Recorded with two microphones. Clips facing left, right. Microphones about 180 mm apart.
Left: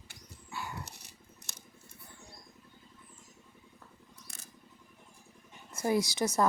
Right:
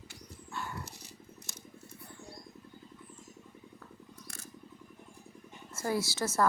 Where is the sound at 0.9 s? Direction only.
65° left (ahead or behind).